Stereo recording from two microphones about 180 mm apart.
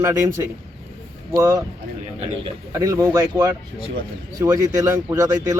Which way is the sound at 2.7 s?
20° right (ahead or behind).